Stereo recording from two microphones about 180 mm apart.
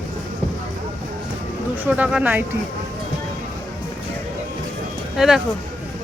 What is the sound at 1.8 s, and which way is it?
Speech, 10° right (ahead or behind).